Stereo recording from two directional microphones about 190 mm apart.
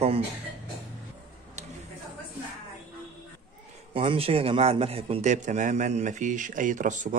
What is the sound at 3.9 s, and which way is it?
A man's voice, 30° right (ahead or behind).